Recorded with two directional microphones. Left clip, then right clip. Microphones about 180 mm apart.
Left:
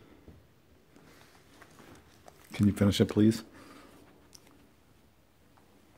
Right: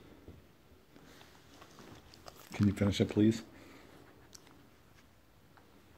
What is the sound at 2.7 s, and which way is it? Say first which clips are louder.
Speech: left 5 dB; 40° left (ahead or behind).